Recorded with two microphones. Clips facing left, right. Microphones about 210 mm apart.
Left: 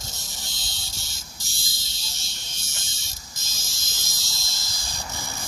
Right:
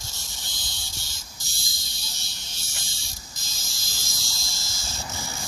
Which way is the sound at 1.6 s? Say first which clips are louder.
Even; 20° left (ahead or behind).